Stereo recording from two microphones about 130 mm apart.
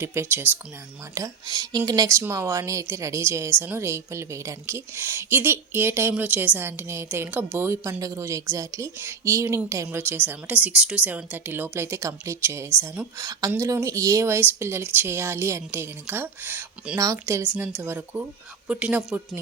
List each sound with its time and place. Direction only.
0.0 s speech: 20° right (ahead or behind)
1.1 s speech: 25° right (ahead or behind)
17.0 s speech: 25° right (ahead or behind)